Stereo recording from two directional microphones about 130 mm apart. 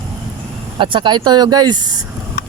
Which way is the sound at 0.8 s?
40° right (ahead or behind).